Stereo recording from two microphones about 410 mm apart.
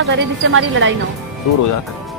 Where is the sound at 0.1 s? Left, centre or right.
Right.